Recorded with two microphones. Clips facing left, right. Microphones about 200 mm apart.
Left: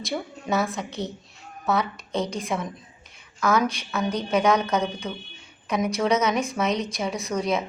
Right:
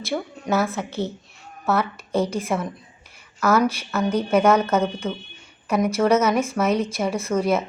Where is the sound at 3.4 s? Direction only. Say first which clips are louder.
Right 3 dB; 5° right (ahead or behind).